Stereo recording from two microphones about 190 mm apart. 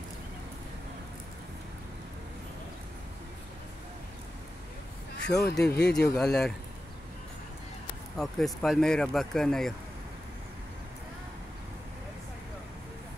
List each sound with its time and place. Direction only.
5.2 s speech: 5° left (ahead or behind)
5.6 s speech: 60° left (ahead or behind)
5.9 s speech: 5° left (ahead or behind)
8.2 s speech: centre (ahead or behind)